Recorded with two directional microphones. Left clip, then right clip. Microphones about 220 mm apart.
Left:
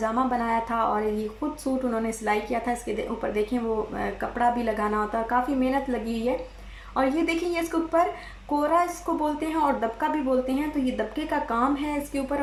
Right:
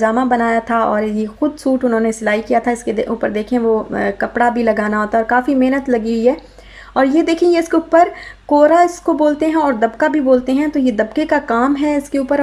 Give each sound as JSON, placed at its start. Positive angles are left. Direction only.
{"t": 0.0, "sound": "speech", "side_deg": -45}